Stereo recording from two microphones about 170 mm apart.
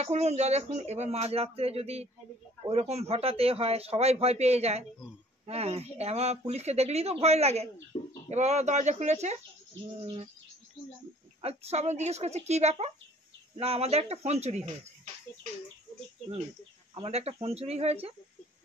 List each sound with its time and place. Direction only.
0.0 s speech: 40° right (ahead or behind)
7.9 s bird: 30° left (ahead or behind)
8.3 s speech: 40° right (ahead or behind)
11.4 s speech: 40° right (ahead or behind)
16.9 s speech: 35° right (ahead or behind)